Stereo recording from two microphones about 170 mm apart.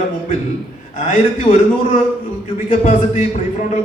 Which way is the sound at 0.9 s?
45° left (ahead or behind).